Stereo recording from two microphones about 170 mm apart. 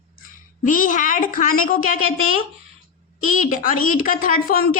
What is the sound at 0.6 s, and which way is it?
A woman's voice, 50° left (ahead or behind).